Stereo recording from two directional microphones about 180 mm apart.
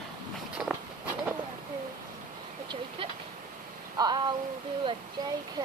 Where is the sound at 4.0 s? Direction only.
20° right (ahead or behind).